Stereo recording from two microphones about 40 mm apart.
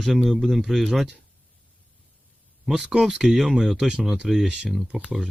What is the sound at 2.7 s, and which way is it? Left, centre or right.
Speech, centre.